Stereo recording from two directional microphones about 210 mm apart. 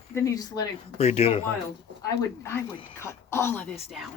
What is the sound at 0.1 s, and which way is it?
Speech, 15° left (ahead or behind).